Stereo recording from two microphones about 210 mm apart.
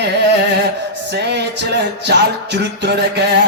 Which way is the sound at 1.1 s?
55° right (ahead or behind).